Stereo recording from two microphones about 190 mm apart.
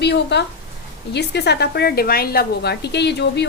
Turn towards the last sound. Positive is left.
turn(degrees=65)  # may be behind; listen again after turning